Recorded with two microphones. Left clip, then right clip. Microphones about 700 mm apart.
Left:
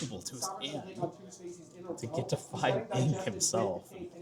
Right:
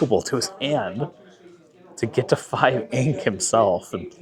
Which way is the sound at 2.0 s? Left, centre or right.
Right.